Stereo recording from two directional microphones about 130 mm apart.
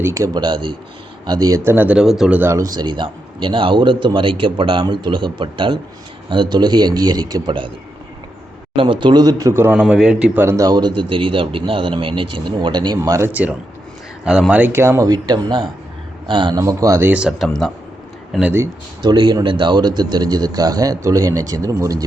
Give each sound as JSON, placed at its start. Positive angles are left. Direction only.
{"t": 0.0, "sound": "speech", "side_deg": -25}
{"t": 0.4, "sound": "a man's voice", "side_deg": -40}
{"t": 2.4, "sound": "a man's voice", "side_deg": -25}
{"t": 8.7, "sound": "a man's voice", "side_deg": -40}
{"t": 9.7, "sound": "speech", "side_deg": -5}
{"t": 10.4, "sound": "speech", "side_deg": -20}
{"t": 10.7, "sound": "a man's voice", "side_deg": -35}
{"t": 13.0, "sound": "speech", "side_deg": -20}
{"t": 19.0, "sound": "speech", "side_deg": -35}